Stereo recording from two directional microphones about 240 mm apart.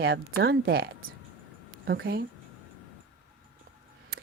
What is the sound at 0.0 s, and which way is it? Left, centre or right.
Speech, right.